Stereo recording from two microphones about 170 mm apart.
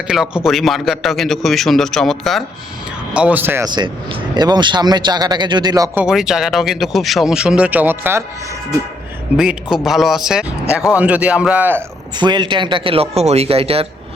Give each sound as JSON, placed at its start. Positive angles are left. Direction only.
{"t": 0.1, "sound": "speech", "side_deg": -5}
{"t": 3.7, "sound": "speech", "side_deg": -30}
{"t": 6.0, "sound": "speech", "side_deg": -5}
{"t": 9.4, "sound": "speech", "side_deg": -5}
{"t": 12.1, "sound": "speech", "side_deg": -25}